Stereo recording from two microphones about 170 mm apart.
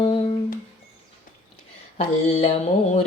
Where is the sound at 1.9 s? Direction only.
35° left (ahead or behind).